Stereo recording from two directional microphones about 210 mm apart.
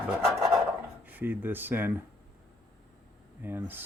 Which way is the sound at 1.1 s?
10° right (ahead or behind).